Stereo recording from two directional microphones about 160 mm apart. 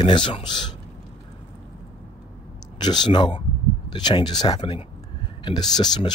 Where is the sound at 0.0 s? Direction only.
30° left (ahead or behind).